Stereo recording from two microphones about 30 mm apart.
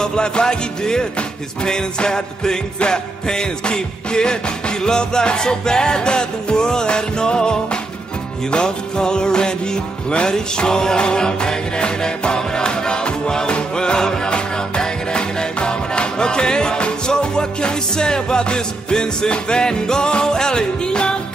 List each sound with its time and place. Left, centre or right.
0.0 s music: left